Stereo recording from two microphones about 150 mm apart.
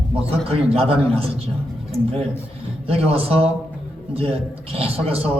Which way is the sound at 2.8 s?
40° right (ahead or behind).